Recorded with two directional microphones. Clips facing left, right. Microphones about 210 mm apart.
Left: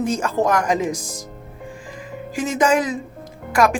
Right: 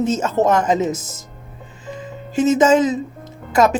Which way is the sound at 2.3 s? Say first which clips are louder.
Right 5 dB; 25° right (ahead or behind).